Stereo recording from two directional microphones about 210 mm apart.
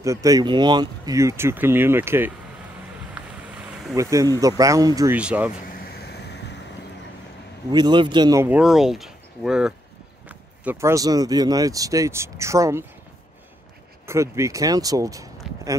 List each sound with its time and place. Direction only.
0.0 s speech: 15° right (ahead or behind)
3.9 s speech: 15° right (ahead or behind)
5.7 s vehicle: 50° left (ahead or behind)
7.7 s speech: 20° right (ahead or behind)
14.0 s speech: 15° right (ahead or behind)
15.5 s a sound: centre (ahead or behind)